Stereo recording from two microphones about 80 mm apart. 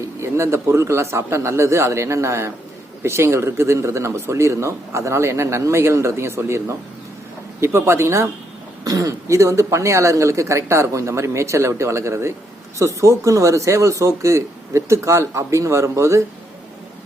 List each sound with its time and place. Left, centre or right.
0.2 s speech: right